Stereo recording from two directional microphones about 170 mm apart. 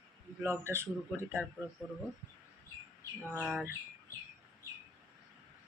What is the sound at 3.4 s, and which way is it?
Speech, 5° right (ahead or behind).